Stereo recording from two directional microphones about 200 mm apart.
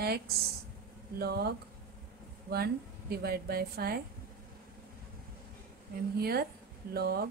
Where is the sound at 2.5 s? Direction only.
50° right (ahead or behind).